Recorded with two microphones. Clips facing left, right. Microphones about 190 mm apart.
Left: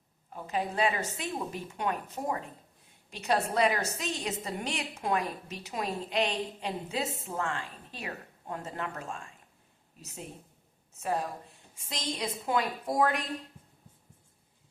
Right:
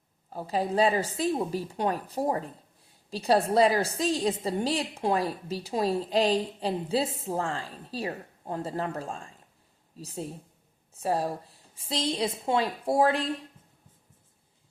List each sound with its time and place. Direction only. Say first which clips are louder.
0.3 s a woman's voice: right 5 dB; 35° right (ahead or behind)
13.6 s music: left 2 dB; 10° left (ahead or behind)